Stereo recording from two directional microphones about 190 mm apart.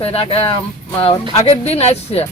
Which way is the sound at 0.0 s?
30° left (ahead or behind).